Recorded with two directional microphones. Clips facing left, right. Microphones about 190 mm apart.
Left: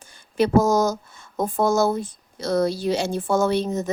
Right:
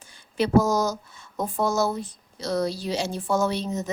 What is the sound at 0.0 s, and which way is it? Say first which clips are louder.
Speech: left 4 dB; 45° left (ahead or behind).